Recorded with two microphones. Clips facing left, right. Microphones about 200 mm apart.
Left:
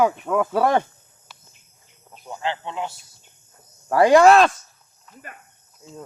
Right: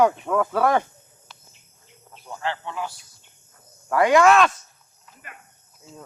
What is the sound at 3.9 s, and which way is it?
Speech, 35° left (ahead or behind).